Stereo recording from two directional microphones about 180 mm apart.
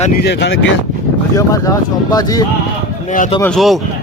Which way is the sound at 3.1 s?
45° left (ahead or behind).